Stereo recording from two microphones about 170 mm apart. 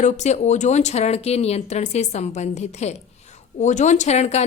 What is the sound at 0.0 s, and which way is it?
Speech, 45° left (ahead or behind).